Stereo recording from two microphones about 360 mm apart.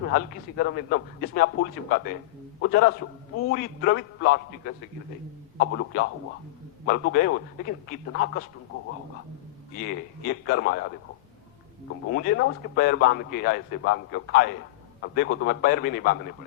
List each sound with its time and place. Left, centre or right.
0.2 s a man's voice: left
9.8 s a man's voice: left
12.1 s a man's voice: left